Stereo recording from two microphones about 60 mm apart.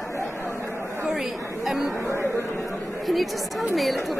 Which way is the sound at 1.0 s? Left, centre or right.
Centre.